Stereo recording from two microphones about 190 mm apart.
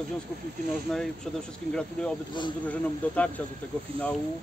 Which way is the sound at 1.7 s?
5° left (ahead or behind).